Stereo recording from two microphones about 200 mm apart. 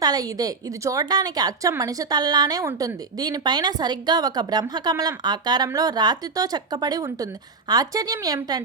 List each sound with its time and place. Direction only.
0.0 s a woman's voice: 20° right (ahead or behind)